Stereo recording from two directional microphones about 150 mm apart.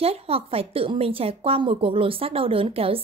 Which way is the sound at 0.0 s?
40° right (ahead or behind).